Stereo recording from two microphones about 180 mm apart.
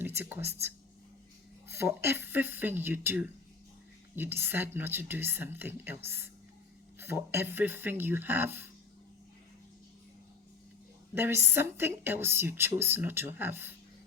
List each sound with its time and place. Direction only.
0.0 s a woman's voice: 10° right (ahead or behind)
11.1 s a woman's voice: 15° right (ahead or behind)